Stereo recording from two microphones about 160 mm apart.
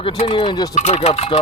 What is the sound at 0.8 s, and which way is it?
Speech, 45° left (ahead or behind).